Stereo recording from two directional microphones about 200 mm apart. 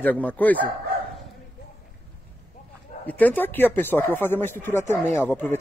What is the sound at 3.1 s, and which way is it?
Speech, 10° left (ahead or behind).